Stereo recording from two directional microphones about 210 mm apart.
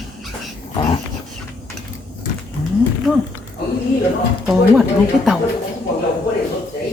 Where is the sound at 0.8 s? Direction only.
25° left (ahead or behind).